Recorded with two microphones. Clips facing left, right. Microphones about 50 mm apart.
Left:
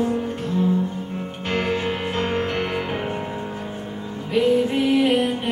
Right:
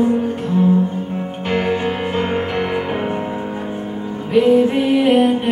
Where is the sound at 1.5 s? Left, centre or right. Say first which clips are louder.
Right 4 dB; centre.